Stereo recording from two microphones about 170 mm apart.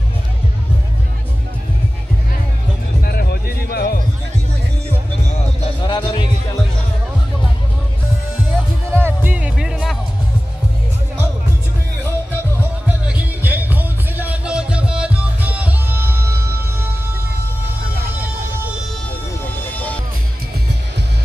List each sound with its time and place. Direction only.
3.0 s music: 65° left (ahead or behind)
5.8 s music: 25° left (ahead or behind)
8.9 s music: 10° right (ahead or behind)
12.8 s music: 10° right (ahead or behind)
19.7 s music: 10° left (ahead or behind)